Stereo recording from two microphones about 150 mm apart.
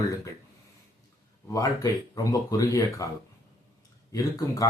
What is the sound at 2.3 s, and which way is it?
Speech, 25° left (ahead or behind).